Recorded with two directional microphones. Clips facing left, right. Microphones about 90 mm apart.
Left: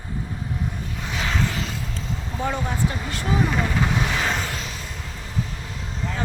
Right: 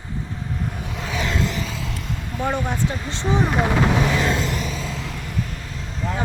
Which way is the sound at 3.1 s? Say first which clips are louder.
Right 4 dB; 25° right (ahead or behind).